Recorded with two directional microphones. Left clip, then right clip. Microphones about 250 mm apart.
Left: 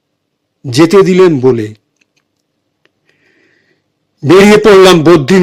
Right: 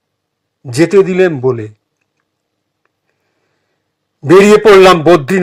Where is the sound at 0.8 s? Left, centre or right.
Left.